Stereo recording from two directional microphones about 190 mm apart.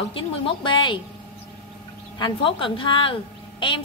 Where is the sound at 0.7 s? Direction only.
25° left (ahead or behind).